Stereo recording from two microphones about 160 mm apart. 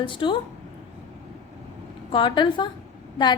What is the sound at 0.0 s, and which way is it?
Speech, 30° left (ahead or behind).